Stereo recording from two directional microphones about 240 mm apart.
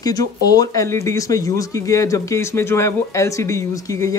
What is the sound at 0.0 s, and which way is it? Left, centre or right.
Speech, centre.